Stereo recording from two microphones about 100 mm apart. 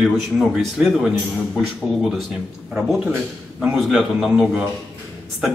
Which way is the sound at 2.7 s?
5° right (ahead or behind).